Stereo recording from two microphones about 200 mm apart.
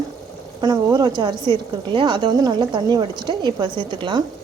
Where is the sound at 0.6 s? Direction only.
15° right (ahead or behind).